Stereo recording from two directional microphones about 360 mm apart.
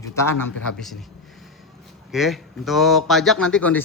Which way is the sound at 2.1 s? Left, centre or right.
Centre.